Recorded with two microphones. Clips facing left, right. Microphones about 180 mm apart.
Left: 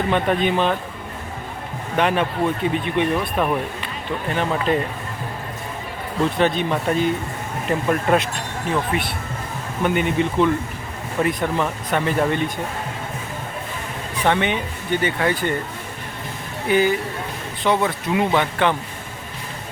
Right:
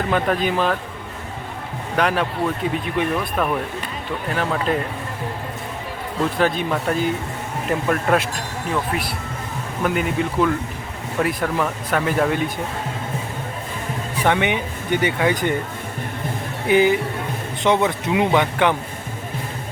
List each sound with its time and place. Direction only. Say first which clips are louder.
0.1 s speech: even; centre (ahead or behind)
2.0 s speech: left 1 dB; centre (ahead or behind)
3.3 s speech: even; 10° left (ahead or behind)
4.3 s speech: left 1 dB; centre (ahead or behind)
6.4 s speech: even; 5° right (ahead or behind)
14.3 s speech: even; 15° right (ahead or behind)
16.6 s speech: right 2 dB; 15° right (ahead or behind)